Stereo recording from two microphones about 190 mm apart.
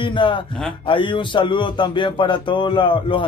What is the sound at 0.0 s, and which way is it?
Speech, 25° left (ahead or behind).